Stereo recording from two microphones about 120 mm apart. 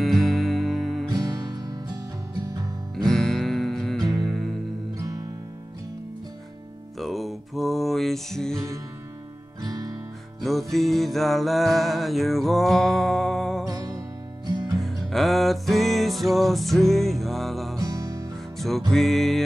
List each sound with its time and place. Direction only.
0.0 s music: centre (ahead or behind)
1.0 s music: 35° right (ahead or behind)
3.1 s music: centre (ahead or behind)
4.9 s music: 30° right (ahead or behind)
7.0 s music: centre (ahead or behind)
9.6 s music: 30° right (ahead or behind)
10.4 s music: centre (ahead or behind)
13.7 s music: 30° right (ahead or behind)
14.8 s music: centre (ahead or behind)
17.7 s music: 30° right (ahead or behind)
18.6 s music: centre (ahead or behind)